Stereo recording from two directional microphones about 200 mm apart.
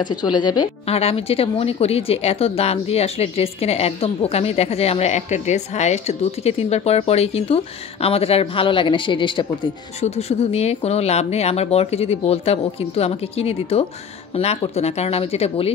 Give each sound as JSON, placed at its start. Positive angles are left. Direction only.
{"t": 0.0, "sound": "a woman's voice", "side_deg": 20}